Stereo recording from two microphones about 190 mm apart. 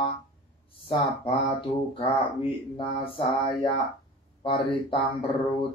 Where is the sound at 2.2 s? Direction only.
25° left (ahead or behind).